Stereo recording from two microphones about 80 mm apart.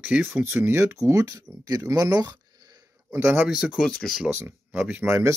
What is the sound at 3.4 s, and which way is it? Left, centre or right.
Speech, centre.